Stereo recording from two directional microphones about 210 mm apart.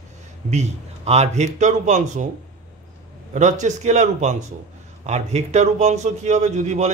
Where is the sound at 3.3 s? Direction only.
35° right (ahead or behind).